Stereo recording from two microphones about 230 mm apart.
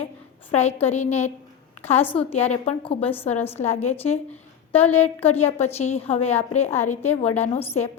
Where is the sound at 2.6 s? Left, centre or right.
Left.